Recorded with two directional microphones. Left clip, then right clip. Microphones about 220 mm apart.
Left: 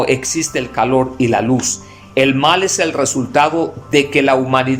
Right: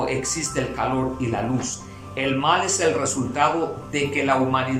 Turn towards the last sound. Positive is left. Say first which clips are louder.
# left 8 dB
turn(degrees=45)  # may be behind; listen again after turning